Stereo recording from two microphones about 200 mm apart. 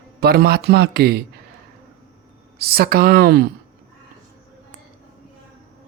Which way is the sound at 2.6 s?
50° right (ahead or behind).